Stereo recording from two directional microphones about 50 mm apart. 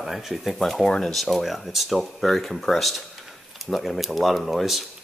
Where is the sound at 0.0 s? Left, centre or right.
Centre.